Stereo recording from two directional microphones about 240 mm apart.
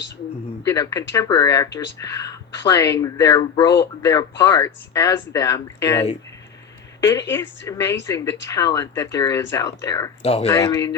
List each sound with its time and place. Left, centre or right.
0.6 s speech: centre
10.2 s speech: left
10.5 s speech: centre